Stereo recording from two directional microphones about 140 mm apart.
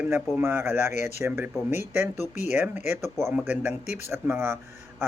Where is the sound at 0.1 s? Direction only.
15° right (ahead or behind).